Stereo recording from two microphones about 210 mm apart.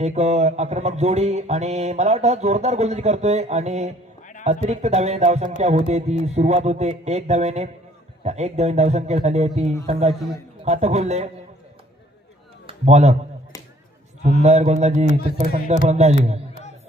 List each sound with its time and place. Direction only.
0.0 s mantra: 30° right (ahead or behind)
12.6 s a sound: 30° right (ahead or behind)
14.4 s mantra: 30° right (ahead or behind)